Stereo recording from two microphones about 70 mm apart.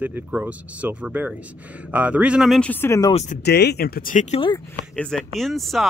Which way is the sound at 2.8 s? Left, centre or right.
Left.